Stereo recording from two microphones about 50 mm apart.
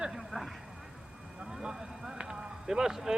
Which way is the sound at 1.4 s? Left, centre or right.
Centre.